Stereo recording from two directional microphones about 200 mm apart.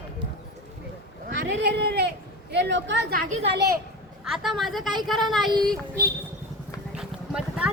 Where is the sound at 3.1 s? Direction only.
45° right (ahead or behind).